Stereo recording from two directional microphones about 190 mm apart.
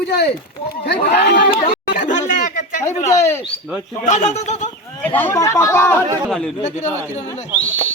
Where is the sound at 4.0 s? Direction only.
40° left (ahead or behind).